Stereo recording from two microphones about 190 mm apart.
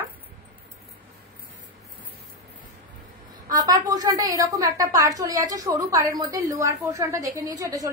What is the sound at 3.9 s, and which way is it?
A woman's voice, 20° right (ahead or behind).